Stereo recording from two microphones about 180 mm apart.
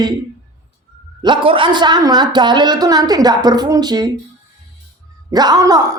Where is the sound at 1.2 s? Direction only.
30° right (ahead or behind).